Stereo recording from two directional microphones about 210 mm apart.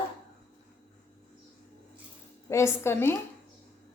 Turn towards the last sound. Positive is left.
turn(degrees=10)  # may be behind; listen again after turning